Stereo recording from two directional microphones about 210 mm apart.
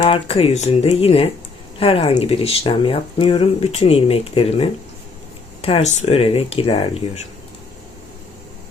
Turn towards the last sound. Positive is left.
turn(degrees=25)  # may be behind; listen again after turning